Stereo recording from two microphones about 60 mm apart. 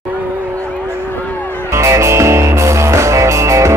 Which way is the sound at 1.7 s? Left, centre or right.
Right.